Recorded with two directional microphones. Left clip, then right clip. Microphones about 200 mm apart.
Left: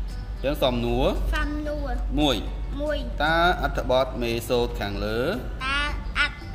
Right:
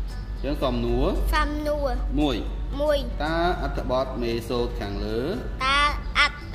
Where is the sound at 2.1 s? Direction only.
35° left (ahead or behind).